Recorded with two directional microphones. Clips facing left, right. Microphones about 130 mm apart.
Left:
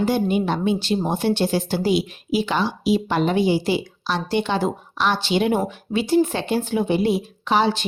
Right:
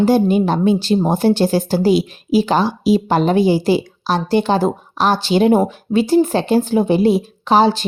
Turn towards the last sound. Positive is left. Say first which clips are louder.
# right 6 dB
turn(degrees=-35)  # may be behind; listen again after turning